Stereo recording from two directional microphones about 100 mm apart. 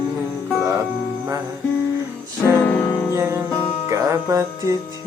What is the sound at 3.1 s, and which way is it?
Music, 30° right (ahead or behind).